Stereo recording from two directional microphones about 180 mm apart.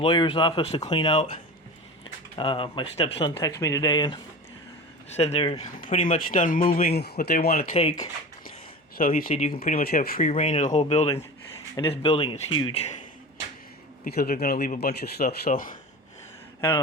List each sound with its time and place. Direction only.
0.0 s speech: 30° left (ahead or behind)
2.4 s speech: 30° left (ahead or behind)
5.1 s speech: 35° left (ahead or behind)
5.8 s speech: 45° left (ahead or behind)
7.7 s speech: 35° left (ahead or behind)
9.0 s speech: 50° left (ahead or behind)
10.2 s speech: 40° left (ahead or behind)
14.0 s speech: 55° left (ahead or behind)
16.6 s speech: 20° left (ahead or behind)